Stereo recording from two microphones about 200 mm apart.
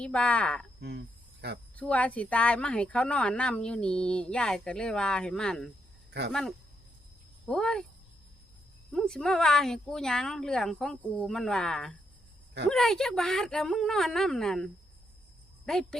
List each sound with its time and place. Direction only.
0.0 s speech: 5° left (ahead or behind)
0.8 s cricket: 55° right (ahead or behind)
1.7 s speech: 5° left (ahead or behind)
7.4 s speech: 5° left (ahead or behind)
8.9 s speech: 5° left (ahead or behind)